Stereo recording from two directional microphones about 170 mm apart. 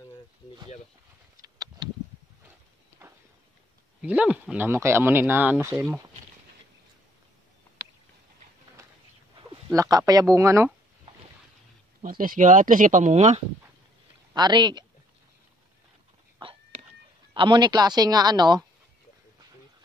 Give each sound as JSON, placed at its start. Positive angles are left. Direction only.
{"t": 1.4, "sound": "a sound", "side_deg": -20}
{"t": 4.0, "sound": "speech", "side_deg": -10}
{"t": 9.8, "sound": "a woman's voice", "side_deg": -20}
{"t": 12.0, "sound": "speech", "side_deg": -55}
{"t": 14.3, "sound": "speech", "side_deg": -25}
{"t": 17.3, "sound": "a woman's voice", "side_deg": -30}